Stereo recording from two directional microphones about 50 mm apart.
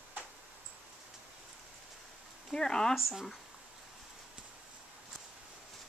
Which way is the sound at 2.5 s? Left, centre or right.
Centre.